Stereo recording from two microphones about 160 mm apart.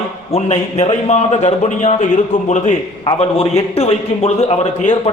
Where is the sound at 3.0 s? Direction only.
35° left (ahead or behind).